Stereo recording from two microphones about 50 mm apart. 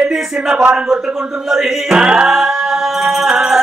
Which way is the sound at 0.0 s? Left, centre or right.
Centre.